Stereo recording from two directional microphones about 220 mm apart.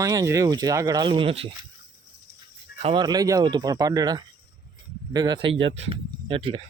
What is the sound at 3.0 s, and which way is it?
Speech, 15° right (ahead or behind).